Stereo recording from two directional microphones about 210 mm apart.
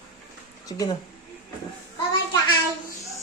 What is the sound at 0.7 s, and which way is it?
Speech, 15° left (ahead or behind).